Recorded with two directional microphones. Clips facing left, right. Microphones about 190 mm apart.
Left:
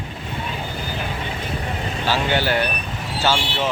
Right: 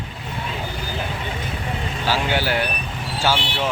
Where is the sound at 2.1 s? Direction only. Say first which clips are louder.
Left 1 dB; 10° right (ahead or behind).